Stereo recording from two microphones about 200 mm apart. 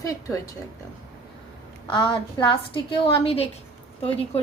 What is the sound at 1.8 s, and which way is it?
A woman's voice, 25° left (ahead or behind).